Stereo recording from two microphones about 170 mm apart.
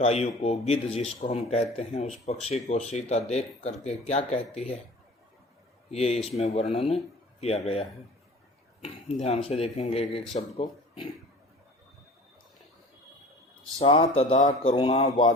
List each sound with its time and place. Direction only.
0.0 s speech: 35° left (ahead or behind)
5.9 s speech: 35° left (ahead or behind)
9.2 s speech: 40° left (ahead or behind)
13.7 s speech: 30° left (ahead or behind)